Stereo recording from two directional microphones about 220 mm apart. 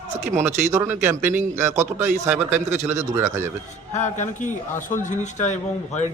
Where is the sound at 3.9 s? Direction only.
35° left (ahead or behind).